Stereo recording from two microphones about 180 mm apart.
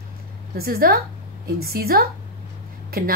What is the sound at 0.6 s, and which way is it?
A woman's voice, 55° right (ahead or behind).